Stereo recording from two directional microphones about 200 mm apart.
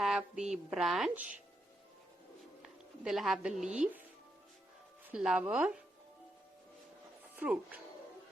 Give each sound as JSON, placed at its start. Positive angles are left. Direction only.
{"t": 0.0, "sound": "a sound", "side_deg": 0}
{"t": 0.5, "sound": "speech", "side_deg": 0}
{"t": 2.6, "sound": "speech", "side_deg": 0}
{"t": 5.1, "sound": "speech", "side_deg": -5}
{"t": 7.3, "sound": "speech", "side_deg": -10}